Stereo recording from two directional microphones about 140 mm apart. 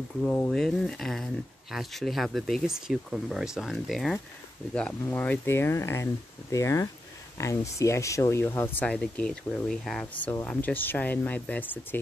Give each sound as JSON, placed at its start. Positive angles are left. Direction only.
{"t": 0.2, "sound": "speech", "side_deg": 5}
{"t": 4.7, "sound": "speech", "side_deg": 10}